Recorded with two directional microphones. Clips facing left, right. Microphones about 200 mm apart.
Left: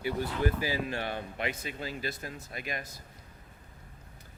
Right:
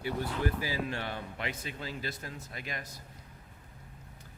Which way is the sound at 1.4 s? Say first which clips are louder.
Left 3 dB; 15° left (ahead or behind).